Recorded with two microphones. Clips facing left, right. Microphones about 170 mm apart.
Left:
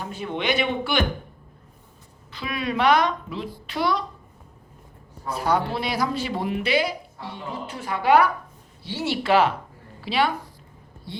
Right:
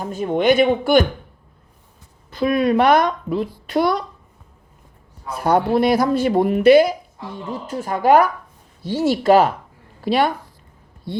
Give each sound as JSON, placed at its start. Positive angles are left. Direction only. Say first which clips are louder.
{"t": 0.0, "sound": "speech", "louder": "right 9 dB", "side_deg": -45}
{"t": 2.3, "sound": "speech", "louder": "right 11 dB", "side_deg": -45}
{"t": 5.4, "sound": "speech", "louder": "right 8 dB", "side_deg": -50}